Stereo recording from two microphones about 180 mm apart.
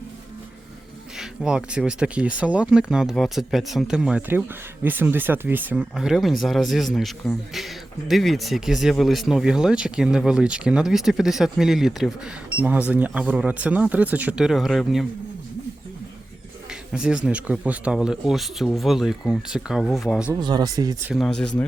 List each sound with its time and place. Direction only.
1.1 s a man's voice: centre (ahead or behind)
16.9 s a man's voice: 5° right (ahead or behind)
20.4 s speech: 25° right (ahead or behind)
21.1 s a man's voice: centre (ahead or behind)